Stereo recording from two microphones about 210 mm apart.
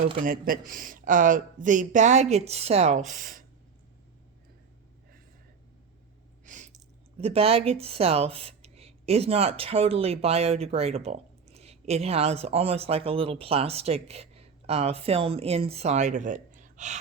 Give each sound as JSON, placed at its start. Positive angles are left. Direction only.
{"t": 0.0, "sound": "speech", "side_deg": -40}
{"t": 6.4, "sound": "a sound", "side_deg": -35}
{"t": 7.2, "sound": "speech", "side_deg": -30}